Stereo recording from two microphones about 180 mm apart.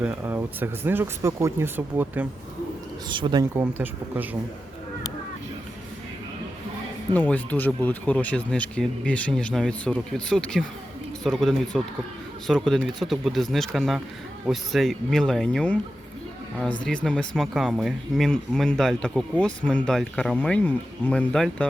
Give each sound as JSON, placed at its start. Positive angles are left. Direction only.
{"t": 0.0, "sound": "speech", "side_deg": -10}
{"t": 3.1, "sound": "speech", "side_deg": -25}
{"t": 3.5, "sound": "speech", "side_deg": -10}
{"t": 7.1, "sound": "speech", "side_deg": 10}
{"t": 16.8, "sound": "speech", "side_deg": 5}